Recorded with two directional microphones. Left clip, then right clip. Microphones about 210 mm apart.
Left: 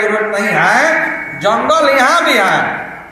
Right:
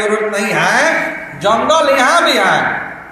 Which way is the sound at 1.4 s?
10° right (ahead or behind).